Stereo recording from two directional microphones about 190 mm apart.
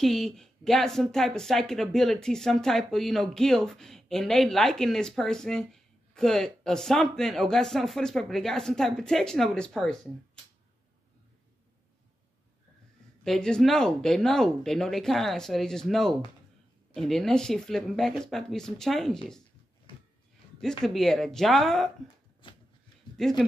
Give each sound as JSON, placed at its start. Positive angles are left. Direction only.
{"t": 0.0, "sound": "speech", "side_deg": 0}
{"t": 13.2, "sound": "speech", "side_deg": 5}
{"t": 20.6, "sound": "speech", "side_deg": 0}
{"t": 22.4, "sound": "a sound", "side_deg": 25}
{"t": 23.1, "sound": "speech", "side_deg": 0}